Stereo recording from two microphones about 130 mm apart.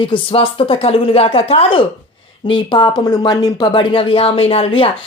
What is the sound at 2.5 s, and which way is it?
Speech, 40° left (ahead or behind).